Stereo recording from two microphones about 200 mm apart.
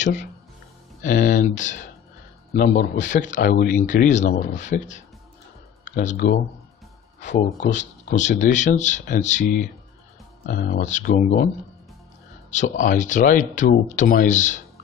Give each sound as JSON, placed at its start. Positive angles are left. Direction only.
{"t": 0.0, "sound": "a man's voice", "side_deg": 35}
{"t": 7.2, "sound": "speech", "side_deg": 60}
{"t": 8.1, "sound": "a man's voice", "side_deg": 40}
{"t": 12.4, "sound": "a man's voice", "side_deg": 40}